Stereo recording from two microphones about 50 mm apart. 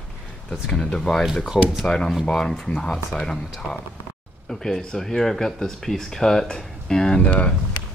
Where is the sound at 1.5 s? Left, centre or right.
Centre.